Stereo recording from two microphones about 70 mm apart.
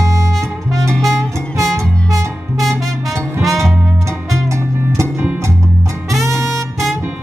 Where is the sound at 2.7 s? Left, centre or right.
Right.